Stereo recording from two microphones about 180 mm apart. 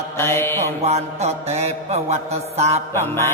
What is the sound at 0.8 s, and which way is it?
Mantra, 35° right (ahead or behind).